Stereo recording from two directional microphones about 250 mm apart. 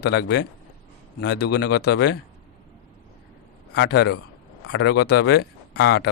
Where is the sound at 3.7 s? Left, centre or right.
Left.